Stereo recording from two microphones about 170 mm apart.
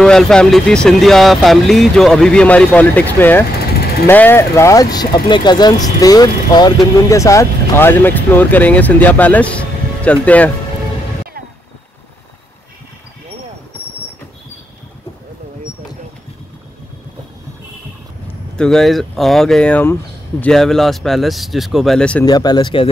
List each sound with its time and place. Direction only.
0.0 s speech: 5° left (ahead or behind)
18.6 s speech: centre (ahead or behind)
22.2 s speech: 25° left (ahead or behind)